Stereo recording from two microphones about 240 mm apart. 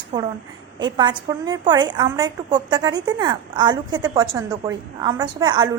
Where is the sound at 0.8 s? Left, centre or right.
Centre.